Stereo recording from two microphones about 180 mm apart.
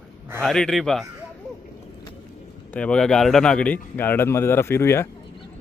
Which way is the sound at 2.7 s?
5° left (ahead or behind).